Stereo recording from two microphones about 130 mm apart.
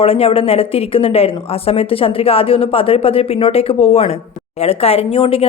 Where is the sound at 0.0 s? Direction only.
50° left (ahead or behind).